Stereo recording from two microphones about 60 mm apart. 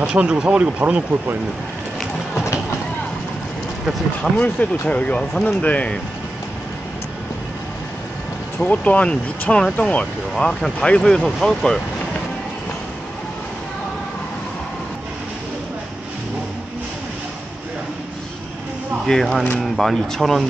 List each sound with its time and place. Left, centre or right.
0.1 s speech: centre
4.2 s speech: left
8.5 s speech: left
10.3 s speech: centre
19.0 s speech: centre